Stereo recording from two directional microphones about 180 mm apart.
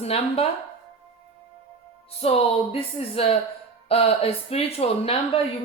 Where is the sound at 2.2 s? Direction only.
35° left (ahead or behind).